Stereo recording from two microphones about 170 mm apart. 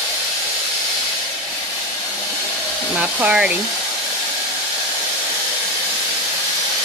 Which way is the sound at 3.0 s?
5° right (ahead or behind).